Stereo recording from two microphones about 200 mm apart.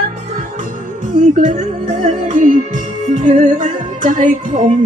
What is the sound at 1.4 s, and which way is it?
Music, 40° right (ahead or behind).